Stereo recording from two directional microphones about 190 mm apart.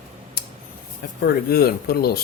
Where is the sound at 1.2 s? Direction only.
55° left (ahead or behind).